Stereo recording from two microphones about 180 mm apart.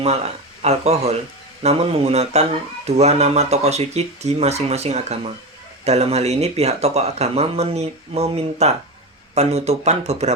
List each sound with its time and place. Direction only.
0.0 s speech: 35° right (ahead or behind)